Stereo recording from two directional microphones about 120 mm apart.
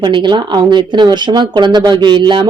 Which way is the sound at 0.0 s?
40° right (ahead or behind).